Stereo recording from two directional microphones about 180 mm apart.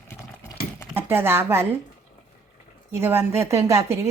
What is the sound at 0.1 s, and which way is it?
Clip-clop, 15° left (ahead or behind).